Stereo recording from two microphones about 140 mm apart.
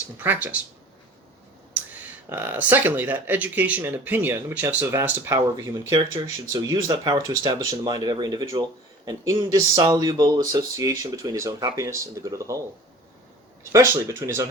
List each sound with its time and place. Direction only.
0.2 s speech: 10° right (ahead or behind)
2.3 s speech: 15° right (ahead or behind)
13.7 s speech: 20° right (ahead or behind)